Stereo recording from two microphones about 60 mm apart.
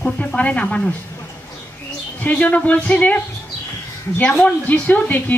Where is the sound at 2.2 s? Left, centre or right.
Left.